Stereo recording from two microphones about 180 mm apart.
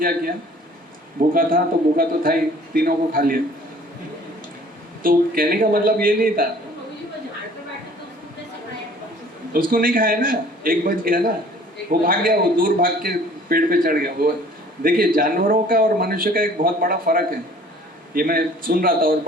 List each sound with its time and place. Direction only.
1.3 s a man's voice: 50° right (ahead or behind)
5.0 s a man's voice: 55° right (ahead or behind)
9.5 s a man's voice: 50° right (ahead or behind)